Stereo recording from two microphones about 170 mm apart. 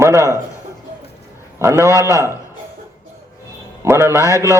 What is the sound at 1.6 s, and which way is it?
Speech, 15° right (ahead or behind).